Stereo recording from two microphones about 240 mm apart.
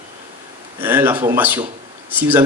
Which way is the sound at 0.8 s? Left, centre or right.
Centre.